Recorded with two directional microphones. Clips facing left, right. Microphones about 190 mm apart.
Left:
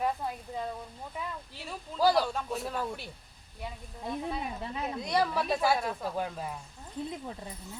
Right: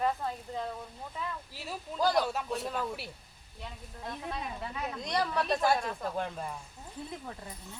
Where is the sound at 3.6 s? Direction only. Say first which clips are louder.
Left 4 dB; 5° left (ahead or behind).